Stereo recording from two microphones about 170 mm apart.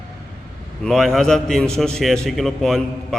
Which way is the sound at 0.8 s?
Centre (ahead or behind).